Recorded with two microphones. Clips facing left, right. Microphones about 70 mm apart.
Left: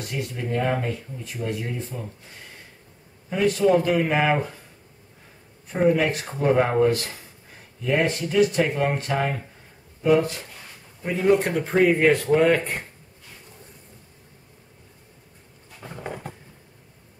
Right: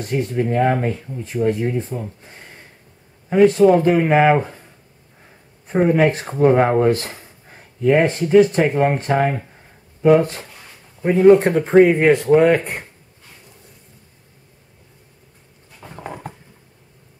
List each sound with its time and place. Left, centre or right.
0.0 s speech: right
5.9 s speech: right